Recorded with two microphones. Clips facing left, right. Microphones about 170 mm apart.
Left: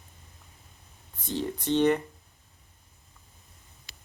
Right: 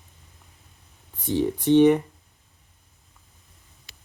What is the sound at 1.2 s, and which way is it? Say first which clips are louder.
Speech: right 8 dB; 15° right (ahead or behind).